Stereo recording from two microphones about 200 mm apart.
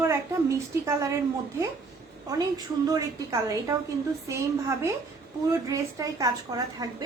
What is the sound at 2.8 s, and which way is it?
A woman's voice, 15° right (ahead or behind).